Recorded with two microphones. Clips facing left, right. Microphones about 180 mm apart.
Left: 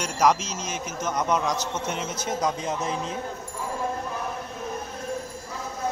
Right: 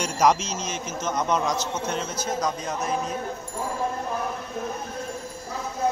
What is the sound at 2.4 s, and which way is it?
Speech, 25° left (ahead or behind).